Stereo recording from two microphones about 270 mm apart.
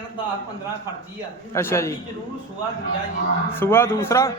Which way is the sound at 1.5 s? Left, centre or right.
Centre.